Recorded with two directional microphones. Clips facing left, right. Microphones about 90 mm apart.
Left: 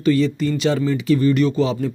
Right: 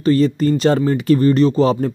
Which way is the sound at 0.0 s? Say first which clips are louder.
Right 3 dB; 40° right (ahead or behind).